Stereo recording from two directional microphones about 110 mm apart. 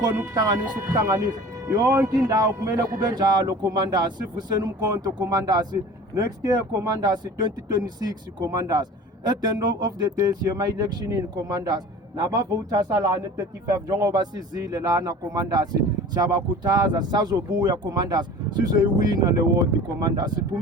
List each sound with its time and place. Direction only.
1.0 s a man's voice: 25° right (ahead or behind)